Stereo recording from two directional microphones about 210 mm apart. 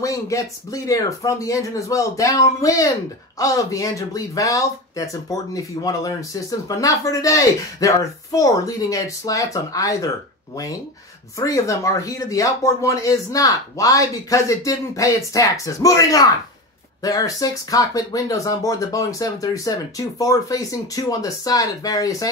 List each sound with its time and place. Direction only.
0.0 s speech: 15° left (ahead or behind)